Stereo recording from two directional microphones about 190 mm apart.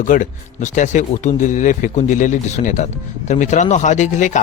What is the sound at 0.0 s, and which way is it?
Speech, 40° left (ahead or behind).